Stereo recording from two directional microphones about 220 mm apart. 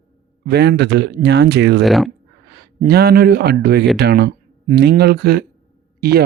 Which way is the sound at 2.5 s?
45° right (ahead or behind).